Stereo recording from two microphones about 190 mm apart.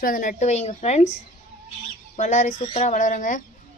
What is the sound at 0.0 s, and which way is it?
Speech, 45° left (ahead or behind).